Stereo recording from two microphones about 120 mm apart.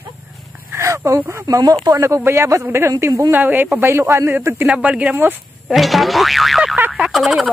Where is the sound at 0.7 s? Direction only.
25° right (ahead or behind).